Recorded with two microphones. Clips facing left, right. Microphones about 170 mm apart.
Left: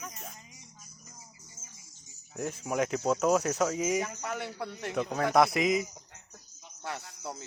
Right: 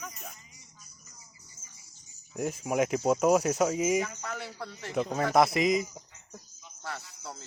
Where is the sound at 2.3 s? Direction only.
10° right (ahead or behind).